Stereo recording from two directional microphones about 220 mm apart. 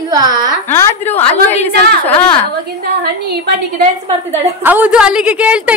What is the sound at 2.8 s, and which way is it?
Speech, 45° right (ahead or behind).